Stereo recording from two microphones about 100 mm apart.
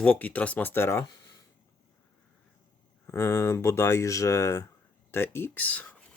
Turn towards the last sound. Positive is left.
turn(degrees=15)  # may be behind; listen again after turning